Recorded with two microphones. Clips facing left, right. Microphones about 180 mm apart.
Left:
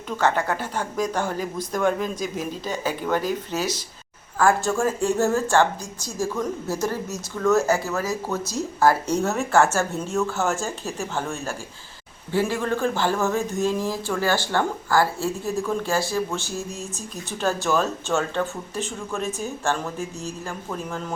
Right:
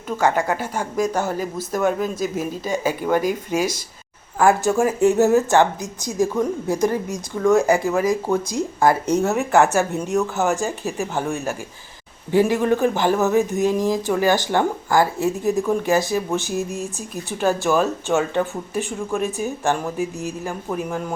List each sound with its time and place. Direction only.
0.2 s speech: 10° right (ahead or behind)